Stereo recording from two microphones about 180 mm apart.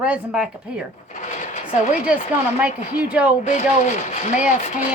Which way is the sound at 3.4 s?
45° left (ahead or behind).